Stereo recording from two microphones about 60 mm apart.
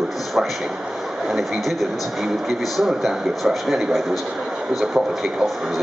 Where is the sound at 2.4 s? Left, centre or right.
Centre.